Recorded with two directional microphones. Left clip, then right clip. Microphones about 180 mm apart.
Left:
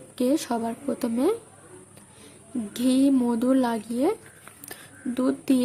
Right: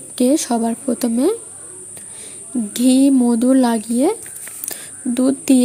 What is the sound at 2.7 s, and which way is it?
Speech, 25° right (ahead or behind).